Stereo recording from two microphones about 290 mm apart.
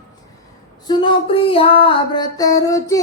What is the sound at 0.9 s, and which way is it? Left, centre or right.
Music, centre.